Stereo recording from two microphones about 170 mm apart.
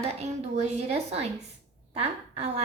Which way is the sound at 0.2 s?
40° right (ahead or behind).